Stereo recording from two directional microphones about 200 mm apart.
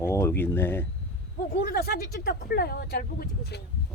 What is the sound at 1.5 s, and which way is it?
Speech, 50° left (ahead or behind).